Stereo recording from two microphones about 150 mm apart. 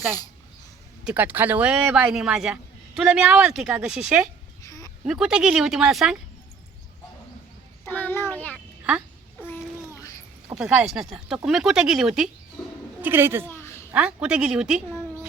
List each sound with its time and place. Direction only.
1.0 s speech: 10° right (ahead or behind)
4.6 s a sound: 25° left (ahead or behind)
5.0 s speech: 5° right (ahead or behind)
7.9 s a child's voice: 15° left (ahead or behind)
10.5 s speech: 5° right (ahead or behind)
13.0 s speech: 15° right (ahead or behind)
13.5 s a sound: 15° left (ahead or behind)
13.9 s speech: 10° right (ahead or behind)